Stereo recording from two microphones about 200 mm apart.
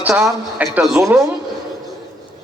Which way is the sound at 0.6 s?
5° right (ahead or behind).